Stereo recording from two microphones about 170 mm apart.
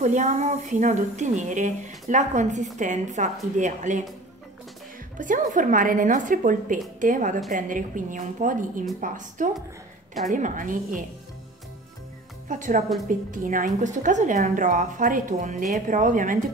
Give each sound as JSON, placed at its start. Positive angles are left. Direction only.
{"t": 0.0, "sound": "a woman's voice", "side_deg": -45}
{"t": 5.1, "sound": "a woman's voice", "side_deg": -50}
{"t": 12.4, "sound": "a woman's voice", "side_deg": -50}